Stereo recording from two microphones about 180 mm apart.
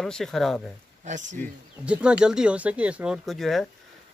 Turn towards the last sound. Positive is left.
turn(degrees=0)  # may be behind; listen again after turning